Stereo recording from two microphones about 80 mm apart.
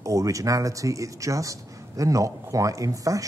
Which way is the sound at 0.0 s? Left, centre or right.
Right.